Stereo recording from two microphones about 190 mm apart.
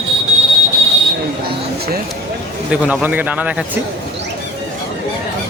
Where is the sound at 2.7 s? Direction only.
5° right (ahead or behind).